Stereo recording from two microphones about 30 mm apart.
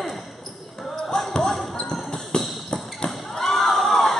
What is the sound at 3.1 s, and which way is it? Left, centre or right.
Crowd, centre.